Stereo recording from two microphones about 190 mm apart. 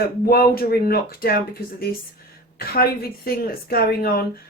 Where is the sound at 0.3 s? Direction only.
50° left (ahead or behind).